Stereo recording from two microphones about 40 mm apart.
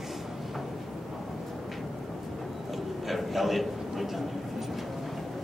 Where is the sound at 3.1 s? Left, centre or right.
Centre.